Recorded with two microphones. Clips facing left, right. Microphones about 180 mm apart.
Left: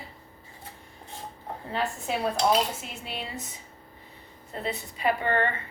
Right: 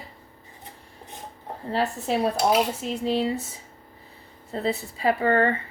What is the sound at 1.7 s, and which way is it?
A woman's voice, 35° right (ahead or behind).